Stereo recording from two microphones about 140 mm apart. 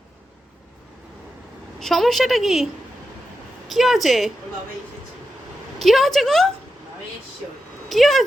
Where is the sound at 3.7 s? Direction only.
Centre (ahead or behind).